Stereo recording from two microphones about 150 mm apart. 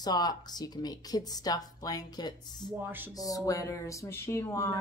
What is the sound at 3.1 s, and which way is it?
Speech, 25° left (ahead or behind).